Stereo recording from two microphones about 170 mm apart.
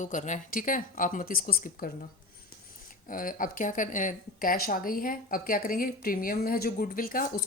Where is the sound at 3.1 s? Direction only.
55° left (ahead or behind).